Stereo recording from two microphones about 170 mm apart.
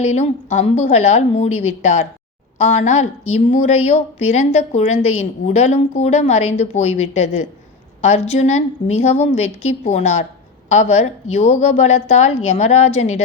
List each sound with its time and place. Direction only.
0.0 s speech: 40° left (ahead or behind)